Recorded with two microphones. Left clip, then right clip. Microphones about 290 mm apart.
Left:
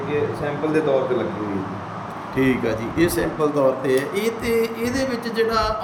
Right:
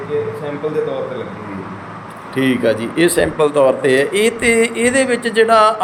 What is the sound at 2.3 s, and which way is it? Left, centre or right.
A man's voice, centre.